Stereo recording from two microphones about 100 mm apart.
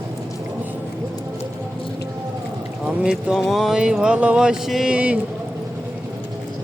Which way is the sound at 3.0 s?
10° right (ahead or behind).